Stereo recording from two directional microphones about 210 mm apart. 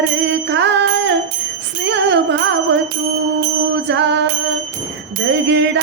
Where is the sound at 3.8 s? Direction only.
55° right (ahead or behind).